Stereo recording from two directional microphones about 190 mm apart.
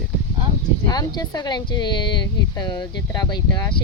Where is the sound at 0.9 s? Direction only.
20° left (ahead or behind).